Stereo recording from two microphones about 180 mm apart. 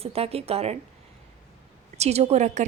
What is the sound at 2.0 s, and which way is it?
Speech, 35° right (ahead or behind).